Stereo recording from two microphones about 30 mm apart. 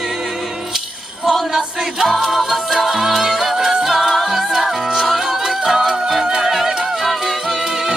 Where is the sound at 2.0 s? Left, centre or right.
Centre.